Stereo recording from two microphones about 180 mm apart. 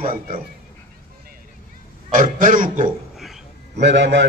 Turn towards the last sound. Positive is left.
turn(degrees=-80)